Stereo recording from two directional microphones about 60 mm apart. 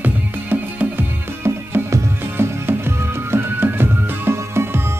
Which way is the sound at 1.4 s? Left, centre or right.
Right.